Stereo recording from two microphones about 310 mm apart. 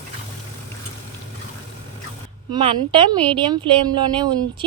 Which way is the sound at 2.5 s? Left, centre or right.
Centre.